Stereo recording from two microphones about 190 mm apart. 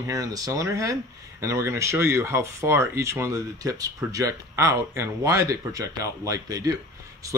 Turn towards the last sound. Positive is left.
turn(degrees=-20)  # may be behind; listen again after turning